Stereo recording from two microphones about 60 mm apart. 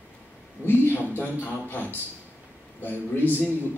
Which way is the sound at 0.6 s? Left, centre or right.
Left.